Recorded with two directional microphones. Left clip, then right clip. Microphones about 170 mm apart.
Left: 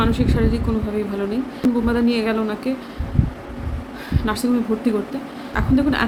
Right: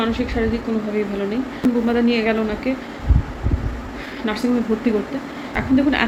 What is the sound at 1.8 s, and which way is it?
Speech, 15° left (ahead or behind).